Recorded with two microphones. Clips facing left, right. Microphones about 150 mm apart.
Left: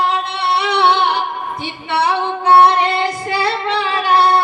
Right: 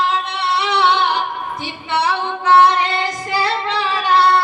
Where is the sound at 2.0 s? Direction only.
30° left (ahead or behind).